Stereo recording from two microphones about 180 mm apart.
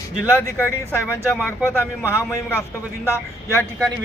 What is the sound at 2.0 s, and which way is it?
Speech, 15° left (ahead or behind).